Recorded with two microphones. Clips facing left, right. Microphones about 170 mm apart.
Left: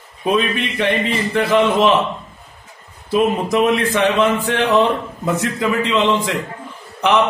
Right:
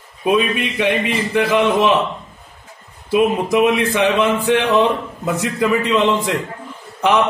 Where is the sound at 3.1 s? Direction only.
10° right (ahead or behind).